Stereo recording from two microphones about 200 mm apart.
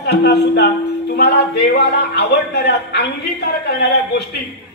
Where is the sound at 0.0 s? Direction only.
55° left (ahead or behind).